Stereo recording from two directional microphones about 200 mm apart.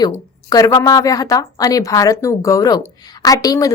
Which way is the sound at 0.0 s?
15° left (ahead or behind).